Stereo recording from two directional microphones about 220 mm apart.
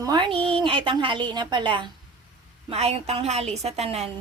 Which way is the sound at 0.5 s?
20° right (ahead or behind).